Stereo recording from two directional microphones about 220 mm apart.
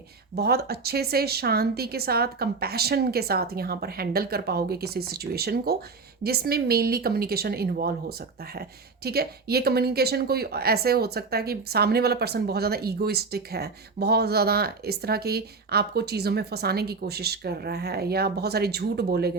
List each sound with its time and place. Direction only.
0.3 s a woman's voice: 45° right (ahead or behind)